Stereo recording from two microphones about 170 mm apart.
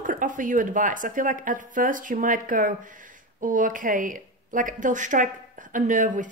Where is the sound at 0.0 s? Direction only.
50° right (ahead or behind).